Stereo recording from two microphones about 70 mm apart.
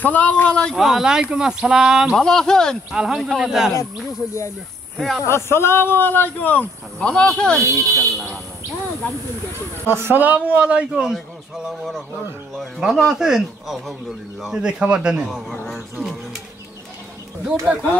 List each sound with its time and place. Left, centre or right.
0.0 s speech: left
0.7 s speech: centre
2.1 s speech: centre
2.9 s speech: centre
4.9 s speech: centre
5.2 s speech: left
7.1 s speech: centre
7.6 s speech: right
9.8 s speech: right; by 11.1 s centre
11.5 s speech: centre
15.2 s speech: centre